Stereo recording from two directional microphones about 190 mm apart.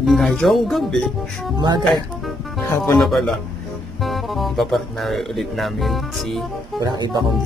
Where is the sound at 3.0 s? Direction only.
Centre (ahead or behind).